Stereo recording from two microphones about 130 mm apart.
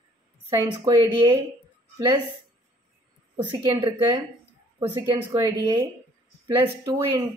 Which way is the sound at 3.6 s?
20° right (ahead or behind).